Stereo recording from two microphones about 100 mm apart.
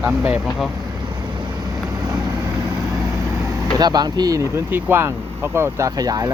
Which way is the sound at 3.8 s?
45° right (ahead or behind).